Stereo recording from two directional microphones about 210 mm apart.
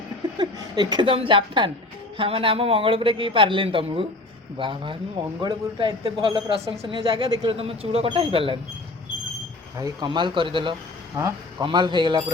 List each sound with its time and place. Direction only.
0.3 s a man's voice: 20° right (ahead or behind)
9.7 s a man's voice: 20° right (ahead or behind)